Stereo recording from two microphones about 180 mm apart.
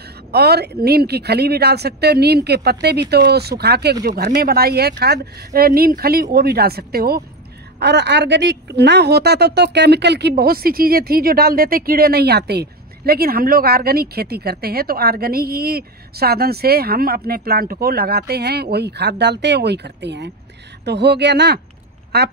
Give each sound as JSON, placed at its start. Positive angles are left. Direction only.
{"t": 0.3, "sound": "speech", "side_deg": -65}
{"t": 7.8, "sound": "speech", "side_deg": -70}